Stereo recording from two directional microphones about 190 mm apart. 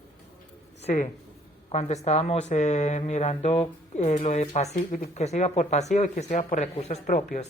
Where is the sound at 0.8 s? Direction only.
35° left (ahead or behind).